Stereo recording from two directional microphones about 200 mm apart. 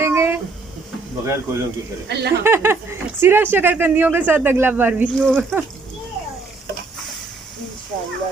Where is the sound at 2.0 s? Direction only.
55° right (ahead or behind).